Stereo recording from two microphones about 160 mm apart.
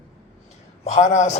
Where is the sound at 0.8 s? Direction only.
45° left (ahead or behind).